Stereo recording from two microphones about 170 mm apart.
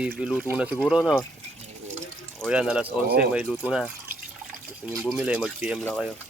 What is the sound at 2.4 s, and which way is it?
Speech, 5° right (ahead or behind).